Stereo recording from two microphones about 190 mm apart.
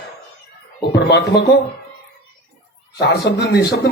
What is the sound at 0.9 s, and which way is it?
Speech, 60° left (ahead or behind).